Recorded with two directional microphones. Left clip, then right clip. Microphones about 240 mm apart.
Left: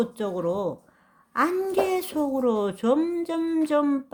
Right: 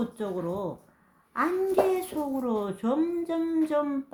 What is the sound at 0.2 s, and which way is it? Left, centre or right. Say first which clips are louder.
A woman's voice: left 5 dB; left.